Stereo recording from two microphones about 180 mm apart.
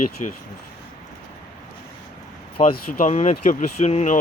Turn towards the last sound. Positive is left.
turn(degrees=40)  # may be behind; listen again after turning